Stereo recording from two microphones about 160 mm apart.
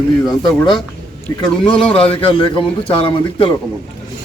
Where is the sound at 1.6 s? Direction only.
5° left (ahead or behind).